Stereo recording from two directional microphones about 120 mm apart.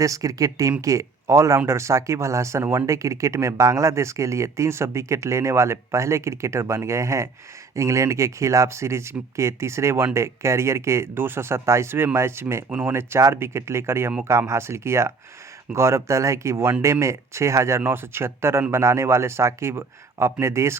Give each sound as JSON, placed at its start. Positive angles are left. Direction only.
{"t": 0.0, "sound": "speech", "side_deg": -30}